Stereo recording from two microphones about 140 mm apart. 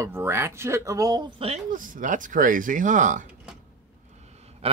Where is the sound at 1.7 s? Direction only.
75° right (ahead or behind).